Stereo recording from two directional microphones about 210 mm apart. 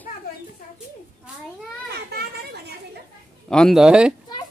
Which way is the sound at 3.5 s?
Centre (ahead or behind).